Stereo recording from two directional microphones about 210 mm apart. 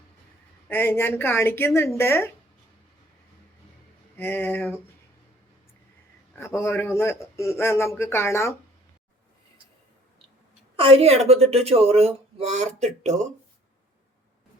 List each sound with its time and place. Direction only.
0.7 s a man's voice: 10° left (ahead or behind)
4.2 s a man's voice: 10° left (ahead or behind)
6.3 s a man's voice: 10° left (ahead or behind)
10.8 s a woman's voice: 25° right (ahead or behind)